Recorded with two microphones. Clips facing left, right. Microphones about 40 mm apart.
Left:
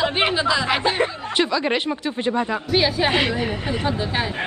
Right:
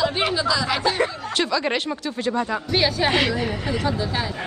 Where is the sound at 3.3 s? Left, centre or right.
Left.